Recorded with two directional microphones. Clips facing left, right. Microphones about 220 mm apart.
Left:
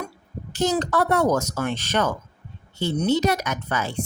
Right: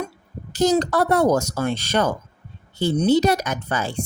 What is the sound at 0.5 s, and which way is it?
Speech, 40° right (ahead or behind).